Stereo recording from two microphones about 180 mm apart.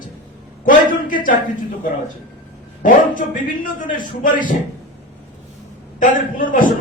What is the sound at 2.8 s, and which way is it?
A man's voice, 45° left (ahead or behind).